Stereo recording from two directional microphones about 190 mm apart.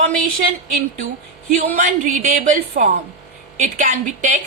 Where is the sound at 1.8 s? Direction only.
40° right (ahead or behind).